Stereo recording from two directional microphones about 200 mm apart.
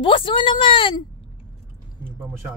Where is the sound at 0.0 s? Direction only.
25° left (ahead or behind).